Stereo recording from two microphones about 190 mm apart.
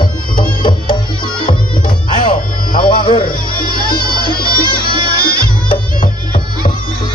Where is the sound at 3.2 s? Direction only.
50° left (ahead or behind).